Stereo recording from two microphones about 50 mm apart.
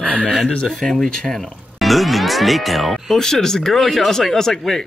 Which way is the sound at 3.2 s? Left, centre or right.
Centre.